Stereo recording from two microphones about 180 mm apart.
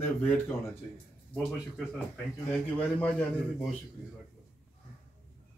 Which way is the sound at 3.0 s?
5° left (ahead or behind).